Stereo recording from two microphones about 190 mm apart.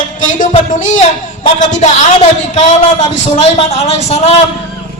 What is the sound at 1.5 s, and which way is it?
Speech, 40° left (ahead or behind).